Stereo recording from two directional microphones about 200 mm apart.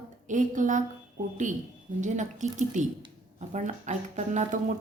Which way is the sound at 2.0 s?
35° right (ahead or behind).